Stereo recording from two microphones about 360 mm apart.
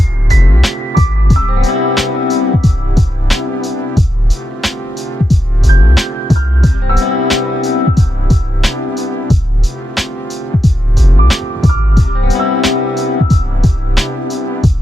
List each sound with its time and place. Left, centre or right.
0.3 s music: centre